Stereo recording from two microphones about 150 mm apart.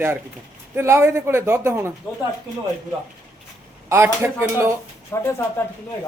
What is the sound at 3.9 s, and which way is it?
Speech, 15° right (ahead or behind).